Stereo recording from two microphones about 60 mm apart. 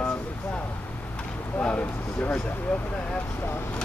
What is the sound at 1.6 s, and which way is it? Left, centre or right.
Speech, left.